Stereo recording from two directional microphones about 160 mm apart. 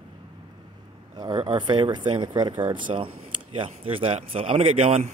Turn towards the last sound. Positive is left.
turn(degrees=-35)  # may be behind; listen again after turning